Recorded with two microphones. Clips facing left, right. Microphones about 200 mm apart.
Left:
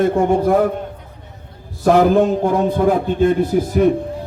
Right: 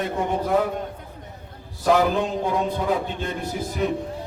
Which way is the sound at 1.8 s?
50° left (ahead or behind).